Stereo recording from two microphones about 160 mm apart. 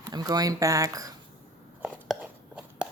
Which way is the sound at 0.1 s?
25° right (ahead or behind).